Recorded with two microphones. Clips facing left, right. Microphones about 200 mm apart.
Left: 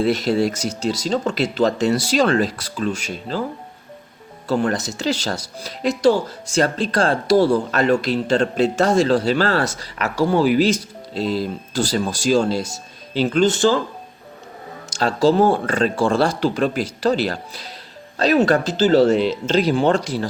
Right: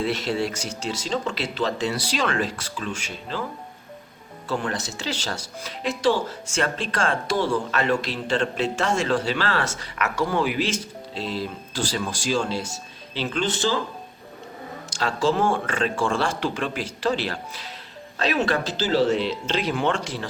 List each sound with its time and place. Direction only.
0.0 s speech: 40° left (ahead or behind)
4.4 s speech: 40° left (ahead or behind)
14.8 s speech: 40° left (ahead or behind)